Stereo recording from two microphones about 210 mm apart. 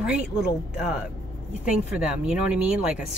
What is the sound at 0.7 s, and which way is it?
Speech, 5° right (ahead or behind).